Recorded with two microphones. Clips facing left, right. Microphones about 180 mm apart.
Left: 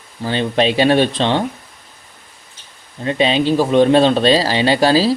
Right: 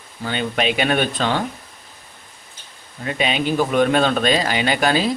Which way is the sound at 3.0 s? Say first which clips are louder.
Left 6 dB; 30° left (ahead or behind).